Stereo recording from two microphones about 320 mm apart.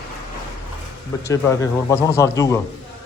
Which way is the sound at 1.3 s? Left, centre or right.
Centre.